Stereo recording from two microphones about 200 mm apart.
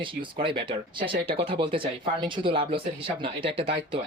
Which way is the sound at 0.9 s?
25° right (ahead or behind).